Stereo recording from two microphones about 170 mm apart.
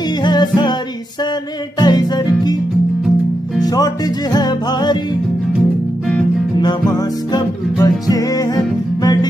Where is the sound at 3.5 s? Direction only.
20° left (ahead or behind).